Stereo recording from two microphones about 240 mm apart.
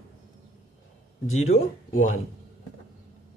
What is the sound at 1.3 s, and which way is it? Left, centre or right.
Speech, left.